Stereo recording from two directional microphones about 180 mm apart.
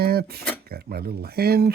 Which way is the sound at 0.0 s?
60° right (ahead or behind).